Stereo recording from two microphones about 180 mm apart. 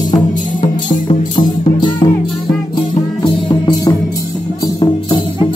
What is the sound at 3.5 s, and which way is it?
Music, 25° left (ahead or behind).